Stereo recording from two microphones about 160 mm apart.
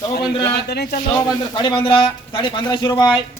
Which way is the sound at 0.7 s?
90° left.